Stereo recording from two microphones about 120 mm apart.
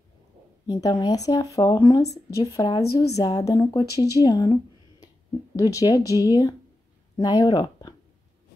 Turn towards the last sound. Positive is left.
turn(degrees=35)  # may be behind; listen again after turning